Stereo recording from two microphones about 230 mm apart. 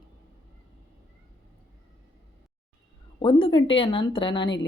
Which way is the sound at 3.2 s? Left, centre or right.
Left.